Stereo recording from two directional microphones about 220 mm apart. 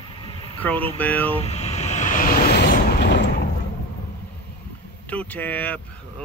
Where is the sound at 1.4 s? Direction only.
30° left (ahead or behind); by 3.2 s 45° left (ahead or behind).